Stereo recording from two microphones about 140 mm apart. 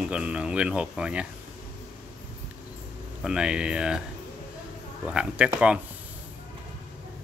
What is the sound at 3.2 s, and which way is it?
Speech, 5° right (ahead or behind).